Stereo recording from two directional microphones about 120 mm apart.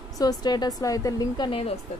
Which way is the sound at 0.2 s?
35° left (ahead or behind).